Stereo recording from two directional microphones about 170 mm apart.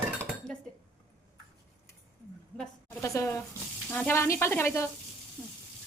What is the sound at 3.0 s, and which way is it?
Speech, 20° left (ahead or behind).